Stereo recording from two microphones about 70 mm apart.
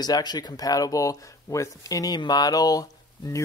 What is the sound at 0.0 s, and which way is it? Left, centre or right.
Speech, left.